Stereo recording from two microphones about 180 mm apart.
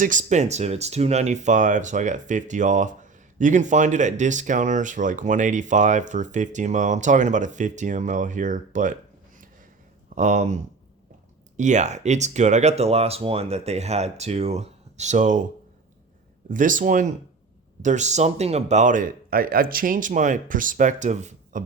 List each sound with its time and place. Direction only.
0.0 s speech: 45° right (ahead or behind)
10.2 s speech: 40° right (ahead or behind)
16.5 s speech: 45° right (ahead or behind)